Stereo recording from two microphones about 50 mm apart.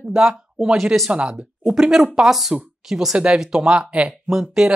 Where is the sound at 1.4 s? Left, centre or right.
Centre.